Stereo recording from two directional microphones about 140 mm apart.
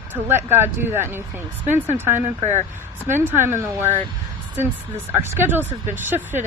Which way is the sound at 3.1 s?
15° right (ahead or behind).